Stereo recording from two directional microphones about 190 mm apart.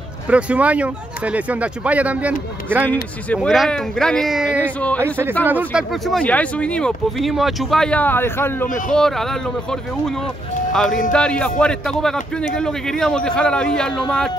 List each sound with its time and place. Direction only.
0.3 s speech: 5° right (ahead or behind)
4.6 s speech: 10° left (ahead or behind)
5.0 s speech: 10° right (ahead or behind); by 14.3 s 5° left (ahead or behind)